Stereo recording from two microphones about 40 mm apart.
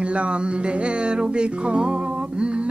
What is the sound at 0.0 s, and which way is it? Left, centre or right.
Music, right.